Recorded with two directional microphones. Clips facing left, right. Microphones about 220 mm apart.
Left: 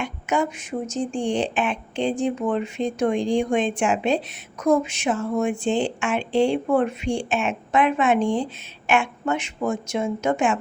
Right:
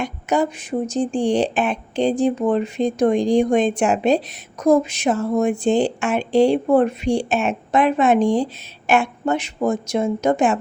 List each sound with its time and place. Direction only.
0.0 s speech: 35° right (ahead or behind)